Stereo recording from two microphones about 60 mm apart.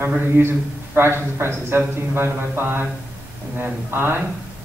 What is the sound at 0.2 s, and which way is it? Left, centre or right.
A man's voice, right.